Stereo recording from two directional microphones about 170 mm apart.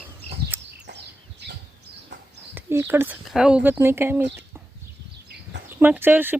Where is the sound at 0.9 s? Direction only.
85° right.